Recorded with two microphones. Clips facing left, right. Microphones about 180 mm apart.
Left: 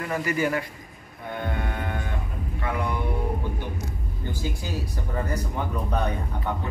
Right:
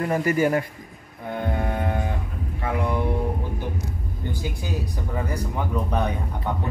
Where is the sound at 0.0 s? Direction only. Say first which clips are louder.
Right 5 dB; 40° right (ahead or behind).